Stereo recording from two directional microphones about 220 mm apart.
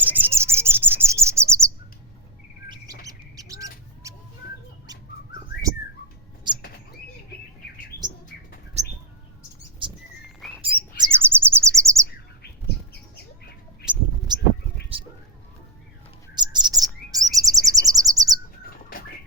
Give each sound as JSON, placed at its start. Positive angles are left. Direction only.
{"t": 0.0, "sound": "bird", "side_deg": -10}
{"t": 2.6, "sound": "bird", "side_deg": -20}
{"t": 8.3, "sound": "bird", "side_deg": 50}
{"t": 9.8, "sound": "bird", "side_deg": -20}
{"t": 14.3, "sound": "a sound", "side_deg": -20}
{"t": 16.3, "sound": "chirp", "side_deg": -20}